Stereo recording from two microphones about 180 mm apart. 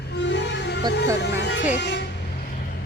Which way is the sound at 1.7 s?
70° left (ahead or behind).